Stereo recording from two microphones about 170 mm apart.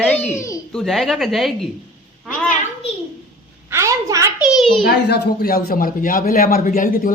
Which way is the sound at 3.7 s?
15° right (ahead or behind).